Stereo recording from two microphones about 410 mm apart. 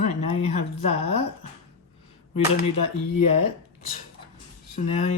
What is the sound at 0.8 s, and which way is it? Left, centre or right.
Speech, left.